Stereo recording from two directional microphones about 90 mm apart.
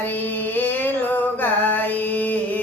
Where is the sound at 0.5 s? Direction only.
20° left (ahead or behind).